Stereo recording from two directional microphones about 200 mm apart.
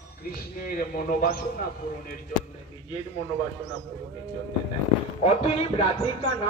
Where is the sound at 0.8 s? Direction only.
45° left (ahead or behind).